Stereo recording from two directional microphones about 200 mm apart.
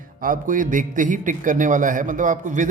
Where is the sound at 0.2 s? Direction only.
40° right (ahead or behind).